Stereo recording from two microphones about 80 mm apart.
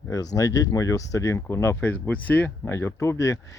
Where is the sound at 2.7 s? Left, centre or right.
Left.